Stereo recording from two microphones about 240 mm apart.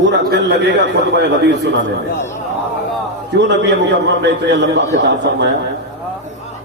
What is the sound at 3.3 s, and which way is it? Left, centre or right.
A man's voice, right.